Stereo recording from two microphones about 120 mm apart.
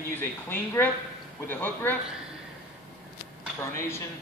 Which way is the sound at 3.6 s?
20° left (ahead or behind).